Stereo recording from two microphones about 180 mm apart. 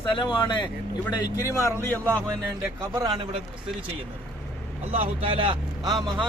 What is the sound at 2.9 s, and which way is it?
Speech, 20° right (ahead or behind).